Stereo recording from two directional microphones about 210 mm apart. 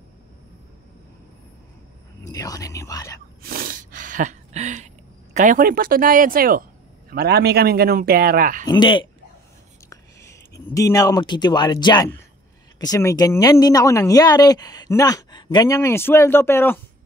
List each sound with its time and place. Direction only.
2.2 s speech: 15° left (ahead or behind)
3.4 s a sound: 45° right (ahead or behind)
7.1 s a man's voice: 50° right (ahead or behind)
8.6 s speech: 20° left (ahead or behind)
10.7 s speech: 15° left (ahead or behind)